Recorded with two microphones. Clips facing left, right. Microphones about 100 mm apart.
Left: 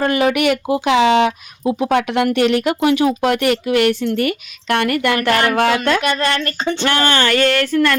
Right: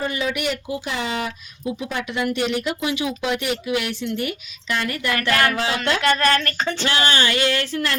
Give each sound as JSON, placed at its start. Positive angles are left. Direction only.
{"t": 0.0, "sound": "speech", "side_deg": 65}
{"t": 6.0, "sound": "a woman's voice", "side_deg": 20}
{"t": 6.8, "sound": "speech", "side_deg": 55}